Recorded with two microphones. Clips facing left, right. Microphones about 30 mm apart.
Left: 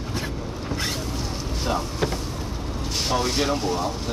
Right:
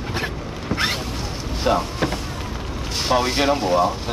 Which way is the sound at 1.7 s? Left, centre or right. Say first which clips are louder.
Right 7 dB; right.